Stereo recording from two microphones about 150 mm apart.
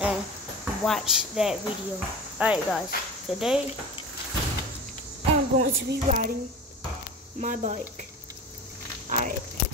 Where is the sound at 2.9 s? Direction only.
80° left.